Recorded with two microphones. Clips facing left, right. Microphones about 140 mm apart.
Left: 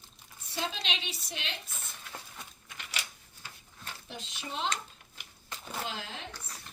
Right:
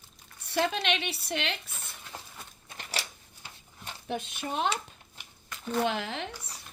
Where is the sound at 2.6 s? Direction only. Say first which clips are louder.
Right 5 dB; 35° right (ahead or behind).